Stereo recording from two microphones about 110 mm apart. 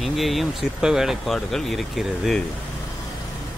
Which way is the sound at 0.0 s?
Centre (ahead or behind).